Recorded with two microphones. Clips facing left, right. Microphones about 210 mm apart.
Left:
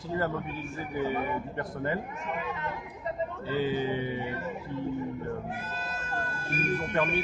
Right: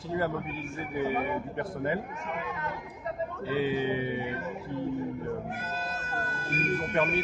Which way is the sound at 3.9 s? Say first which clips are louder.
Right 1 dB; 90° right.